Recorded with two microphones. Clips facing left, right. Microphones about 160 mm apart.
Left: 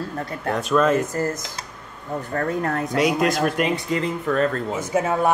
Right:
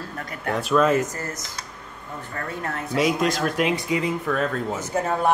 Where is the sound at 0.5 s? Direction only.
Centre (ahead or behind).